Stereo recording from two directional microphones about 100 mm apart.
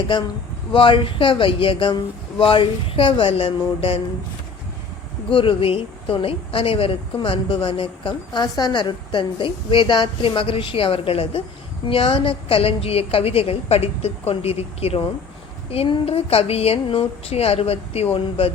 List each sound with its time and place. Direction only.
0.7 s a woman's voice: 60° left (ahead or behind)
5.3 s a woman's voice: 65° left (ahead or behind); by 15.0 s 90° left
15.7 s a woman's voice: 75° left (ahead or behind)